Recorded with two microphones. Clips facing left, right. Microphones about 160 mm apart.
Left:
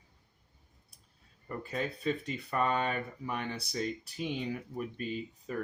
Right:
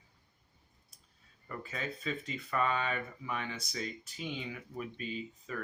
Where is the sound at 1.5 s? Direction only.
40° left (ahead or behind).